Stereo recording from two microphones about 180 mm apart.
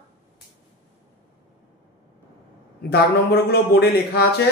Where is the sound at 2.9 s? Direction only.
65° left (ahead or behind).